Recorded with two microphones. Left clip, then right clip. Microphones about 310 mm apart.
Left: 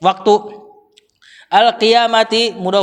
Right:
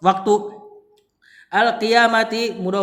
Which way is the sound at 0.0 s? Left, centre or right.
Centre.